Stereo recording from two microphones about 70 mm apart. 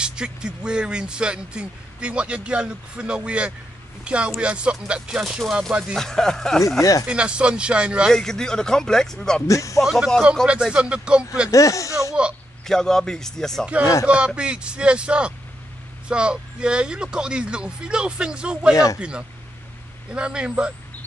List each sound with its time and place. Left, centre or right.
0.0 s speech: centre
5.9 s speech: centre
6.8 s speech: left
7.1 s speech: centre
8.1 s speech: centre
9.5 s speech: left
9.8 s speech: centre
10.4 s speech: centre
11.5 s speech: left
12.6 s speech: centre
14.0 s speech: centre